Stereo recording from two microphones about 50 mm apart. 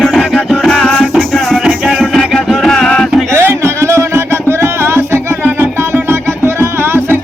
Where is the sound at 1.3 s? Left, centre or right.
Centre.